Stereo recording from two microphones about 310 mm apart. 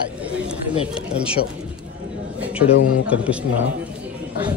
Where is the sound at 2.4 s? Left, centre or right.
Centre.